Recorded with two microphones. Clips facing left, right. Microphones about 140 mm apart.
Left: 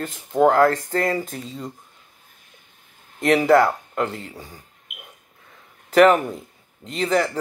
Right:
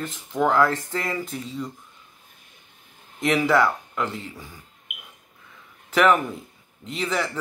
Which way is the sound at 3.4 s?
55° left (ahead or behind).